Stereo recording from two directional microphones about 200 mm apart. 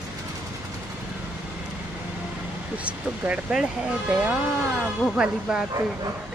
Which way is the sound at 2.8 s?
5° right (ahead or behind).